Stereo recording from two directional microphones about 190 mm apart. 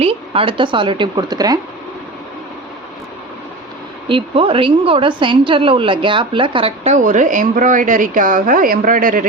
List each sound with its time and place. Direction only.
0.0 s speech: 30° right (ahead or behind)
4.1 s a woman's voice: 30° right (ahead or behind); by 9.2 s 45° right (ahead or behind)